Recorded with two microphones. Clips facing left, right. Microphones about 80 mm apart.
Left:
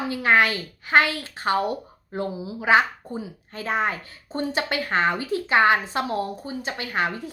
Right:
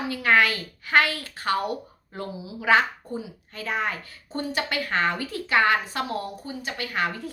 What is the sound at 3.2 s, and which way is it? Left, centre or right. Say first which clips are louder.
A woman's voice: left 2 dB; left.